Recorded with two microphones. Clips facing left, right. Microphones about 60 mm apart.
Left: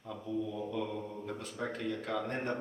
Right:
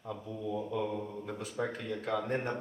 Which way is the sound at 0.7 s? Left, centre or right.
Centre.